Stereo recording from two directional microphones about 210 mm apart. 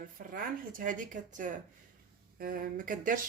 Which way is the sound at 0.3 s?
40° right (ahead or behind).